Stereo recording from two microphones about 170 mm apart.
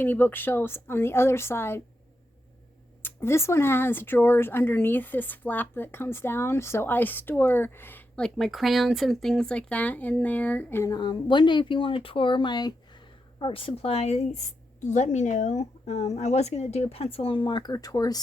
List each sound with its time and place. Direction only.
0.0 s speech: 10° left (ahead or behind)
3.0 s a woman's voice: 15° left (ahead or behind)